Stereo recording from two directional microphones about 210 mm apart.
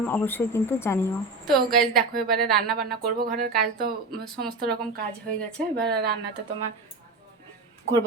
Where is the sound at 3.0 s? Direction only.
45° right (ahead or behind).